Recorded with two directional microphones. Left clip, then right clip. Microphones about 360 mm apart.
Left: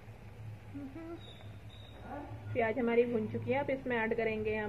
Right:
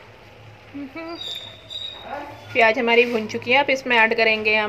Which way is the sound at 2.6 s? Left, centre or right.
Right.